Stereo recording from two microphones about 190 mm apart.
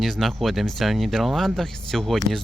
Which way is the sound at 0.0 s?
Centre (ahead or behind).